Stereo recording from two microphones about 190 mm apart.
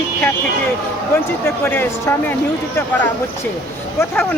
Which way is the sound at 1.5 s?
10° left (ahead or behind).